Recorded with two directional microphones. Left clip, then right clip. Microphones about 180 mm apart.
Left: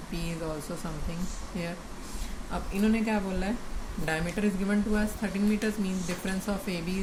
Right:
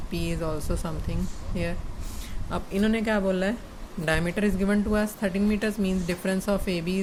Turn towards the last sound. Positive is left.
turn(degrees=-55)  # may be behind; listen again after turning